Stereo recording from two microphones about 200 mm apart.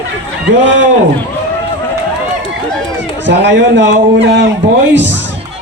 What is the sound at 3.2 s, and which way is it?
A man's voice, 65° right (ahead or behind).